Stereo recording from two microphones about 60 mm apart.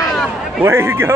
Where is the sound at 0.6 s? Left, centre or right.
Right.